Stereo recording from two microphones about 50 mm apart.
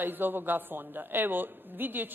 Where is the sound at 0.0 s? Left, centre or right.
Right.